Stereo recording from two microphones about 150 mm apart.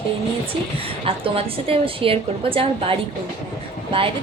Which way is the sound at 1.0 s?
40° right (ahead or behind).